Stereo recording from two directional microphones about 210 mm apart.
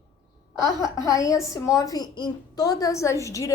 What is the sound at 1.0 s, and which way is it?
A woman's voice, 15° left (ahead or behind).